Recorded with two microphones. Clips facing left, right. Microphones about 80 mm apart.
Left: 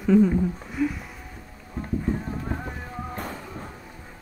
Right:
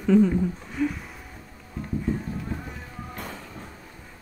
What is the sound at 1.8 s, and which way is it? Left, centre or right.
Music, left.